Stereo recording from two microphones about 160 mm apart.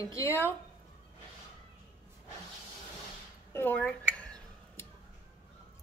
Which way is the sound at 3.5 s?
10° left (ahead or behind).